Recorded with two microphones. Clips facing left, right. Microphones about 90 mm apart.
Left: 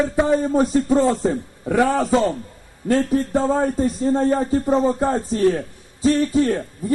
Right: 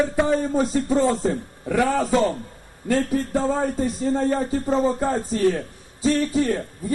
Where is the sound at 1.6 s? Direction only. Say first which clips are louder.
Left 3 dB; 20° left (ahead or behind).